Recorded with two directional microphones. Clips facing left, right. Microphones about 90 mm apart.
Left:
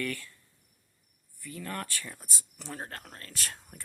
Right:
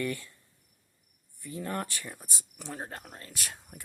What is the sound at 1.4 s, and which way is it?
Speech, 25° right (ahead or behind).